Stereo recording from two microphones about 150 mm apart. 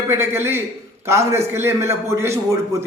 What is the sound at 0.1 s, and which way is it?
A man's voice, 15° right (ahead or behind).